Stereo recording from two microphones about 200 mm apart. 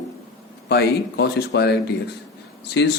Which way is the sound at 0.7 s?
55° left (ahead or behind).